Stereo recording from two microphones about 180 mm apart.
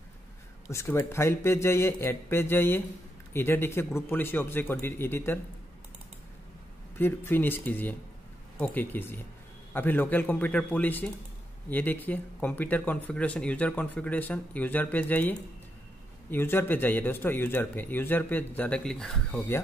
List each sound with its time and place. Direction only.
0.7 s speech: 15° left (ahead or behind)
7.0 s speech: 10° left (ahead or behind)